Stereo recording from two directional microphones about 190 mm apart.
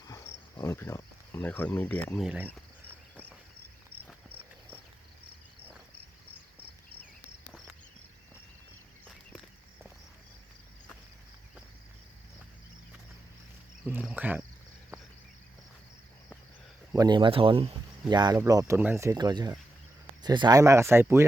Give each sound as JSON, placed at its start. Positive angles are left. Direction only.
{"t": 0.0, "sound": "cricket", "side_deg": 20}
{"t": 2.1, "sound": "speech", "side_deg": -5}
{"t": 13.8, "sound": "speech", "side_deg": -5}
{"t": 16.9, "sound": "speech", "side_deg": -20}